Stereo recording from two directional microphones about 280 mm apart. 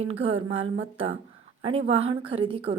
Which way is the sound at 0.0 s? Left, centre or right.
Right.